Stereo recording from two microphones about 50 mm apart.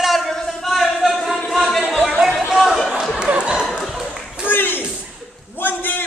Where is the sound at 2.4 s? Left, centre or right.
Centre.